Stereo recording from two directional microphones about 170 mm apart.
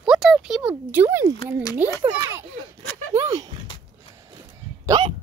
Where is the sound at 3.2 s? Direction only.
20° right (ahead or behind).